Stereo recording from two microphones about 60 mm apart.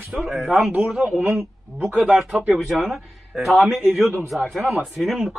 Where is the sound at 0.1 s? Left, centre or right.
Centre.